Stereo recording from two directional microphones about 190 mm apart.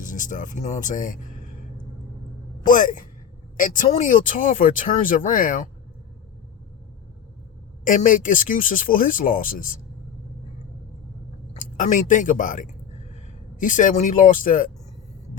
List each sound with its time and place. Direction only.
0.0 s speech: 45° left (ahead or behind)
2.6 s speech: 45° left (ahead or behind)
7.9 s speech: 45° left (ahead or behind)
11.6 s speech: 45° left (ahead or behind)